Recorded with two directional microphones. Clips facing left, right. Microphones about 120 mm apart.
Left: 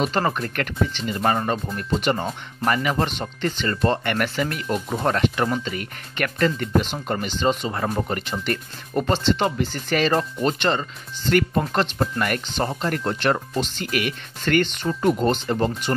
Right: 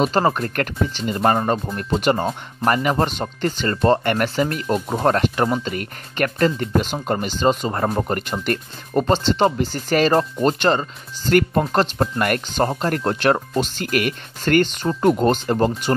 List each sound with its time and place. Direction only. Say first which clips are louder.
0.0 s speech: right 4 dB; 35° right (ahead or behind)
8.9 s speech: right 3 dB; 35° right (ahead or behind)
11.6 s speech: right 3 dB; 35° right (ahead or behind)
12.2 s speech: right 6 dB; 50° right (ahead or behind)